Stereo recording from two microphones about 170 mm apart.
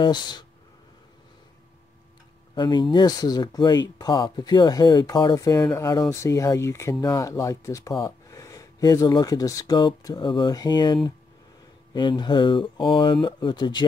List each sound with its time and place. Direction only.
0.0 s speech: 25° left (ahead or behind)
2.5 s speech: 25° left (ahead or behind)